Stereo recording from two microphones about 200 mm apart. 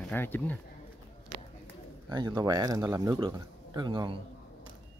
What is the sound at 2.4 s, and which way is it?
Speech, 20° right (ahead or behind).